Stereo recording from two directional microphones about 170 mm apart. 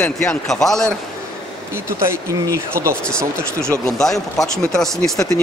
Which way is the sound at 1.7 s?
15° right (ahead or behind).